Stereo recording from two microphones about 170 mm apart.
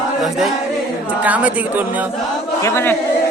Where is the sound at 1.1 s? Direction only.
10° right (ahead or behind).